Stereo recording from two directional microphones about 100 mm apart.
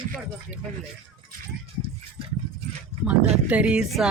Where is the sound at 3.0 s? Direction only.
15° right (ahead or behind).